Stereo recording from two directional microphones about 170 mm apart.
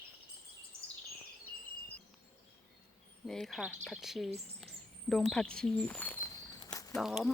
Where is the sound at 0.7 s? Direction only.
35° right (ahead or behind).